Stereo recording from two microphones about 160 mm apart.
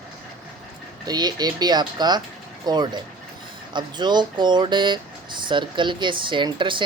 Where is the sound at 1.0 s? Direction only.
25° right (ahead or behind).